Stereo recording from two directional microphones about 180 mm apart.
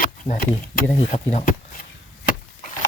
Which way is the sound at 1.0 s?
40° left (ahead or behind).